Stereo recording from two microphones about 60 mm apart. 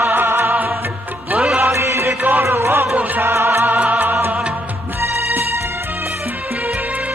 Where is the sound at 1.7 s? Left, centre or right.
Right.